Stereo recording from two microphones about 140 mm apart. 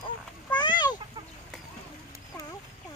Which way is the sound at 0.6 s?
30° left (ahead or behind).